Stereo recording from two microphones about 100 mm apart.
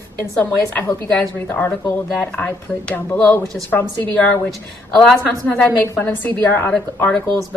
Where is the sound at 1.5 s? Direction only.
20° left (ahead or behind).